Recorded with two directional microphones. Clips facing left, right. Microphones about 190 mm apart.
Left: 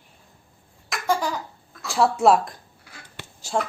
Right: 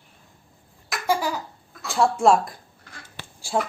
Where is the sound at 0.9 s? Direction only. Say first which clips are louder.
Even; 5° right (ahead or behind).